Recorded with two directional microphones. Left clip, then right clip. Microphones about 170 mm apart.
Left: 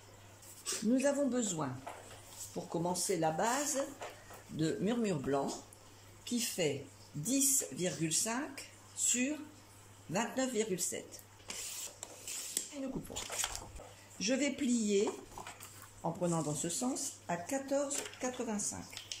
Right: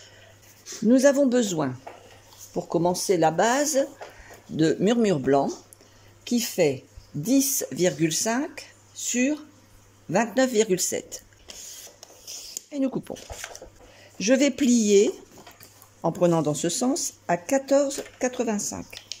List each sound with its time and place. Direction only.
0.8 s speech: 60° right (ahead or behind)
13.1 s speech: 60° right (ahead or behind)